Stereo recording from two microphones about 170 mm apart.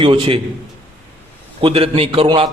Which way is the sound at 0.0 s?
30° right (ahead or behind).